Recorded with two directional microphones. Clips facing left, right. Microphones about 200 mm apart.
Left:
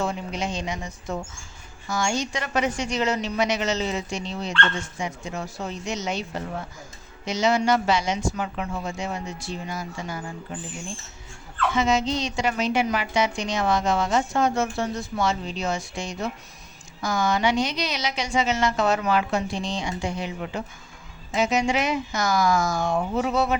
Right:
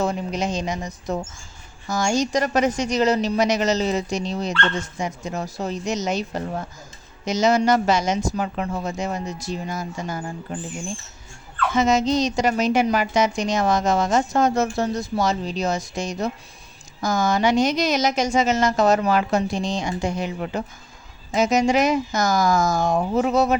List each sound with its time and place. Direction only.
0.0 s a woman's voice: 40° right (ahead or behind)
11.7 s a woman's voice: 45° right (ahead or behind)